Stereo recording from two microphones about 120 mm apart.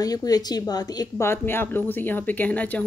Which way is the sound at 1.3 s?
20° left (ahead or behind).